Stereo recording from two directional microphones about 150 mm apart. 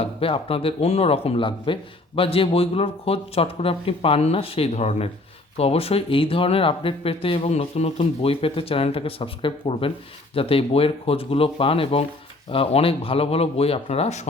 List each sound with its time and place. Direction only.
0.0 s speech: 40° left (ahead or behind)